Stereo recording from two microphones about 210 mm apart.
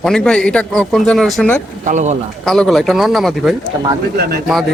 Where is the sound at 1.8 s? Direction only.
35° right (ahead or behind).